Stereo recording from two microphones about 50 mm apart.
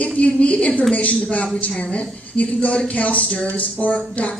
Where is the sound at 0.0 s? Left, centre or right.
Left.